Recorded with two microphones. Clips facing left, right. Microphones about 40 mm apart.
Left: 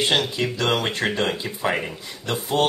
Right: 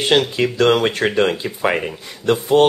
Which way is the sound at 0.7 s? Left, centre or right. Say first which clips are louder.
Right 6 dB; right.